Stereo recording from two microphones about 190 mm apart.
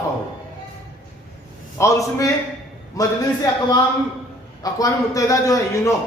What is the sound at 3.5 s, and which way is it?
Speech, 20° left (ahead or behind).